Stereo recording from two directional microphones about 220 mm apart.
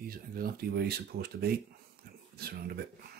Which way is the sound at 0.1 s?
45° right (ahead or behind).